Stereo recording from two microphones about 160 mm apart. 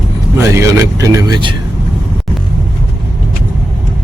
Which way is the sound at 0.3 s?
15° right (ahead or behind).